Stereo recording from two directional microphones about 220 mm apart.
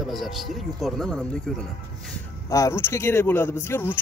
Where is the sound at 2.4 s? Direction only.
15° left (ahead or behind).